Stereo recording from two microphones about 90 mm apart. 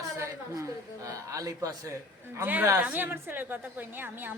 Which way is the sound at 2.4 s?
20° right (ahead or behind).